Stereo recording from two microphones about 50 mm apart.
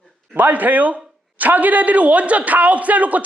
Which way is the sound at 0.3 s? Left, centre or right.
Right.